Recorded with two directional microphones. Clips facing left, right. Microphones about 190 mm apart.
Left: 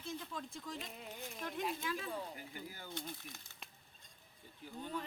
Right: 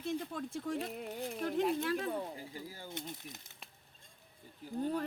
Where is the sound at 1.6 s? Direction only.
60° right (ahead or behind).